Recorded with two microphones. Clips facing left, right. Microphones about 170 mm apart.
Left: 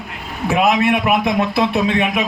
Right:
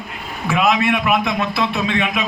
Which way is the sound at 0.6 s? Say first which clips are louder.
Left 2 dB; 50° left (ahead or behind).